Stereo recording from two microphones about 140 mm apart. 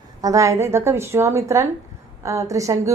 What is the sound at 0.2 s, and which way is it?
A woman's voice, 25° right (ahead or behind).